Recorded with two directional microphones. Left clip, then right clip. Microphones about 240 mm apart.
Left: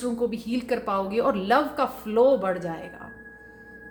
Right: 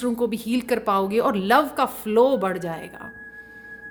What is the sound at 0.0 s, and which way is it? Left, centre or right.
A woman's voice, right.